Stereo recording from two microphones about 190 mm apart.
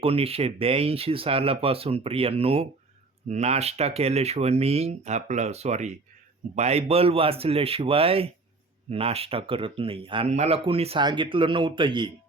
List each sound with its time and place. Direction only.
0.0 s speech: 30° right (ahead or behind)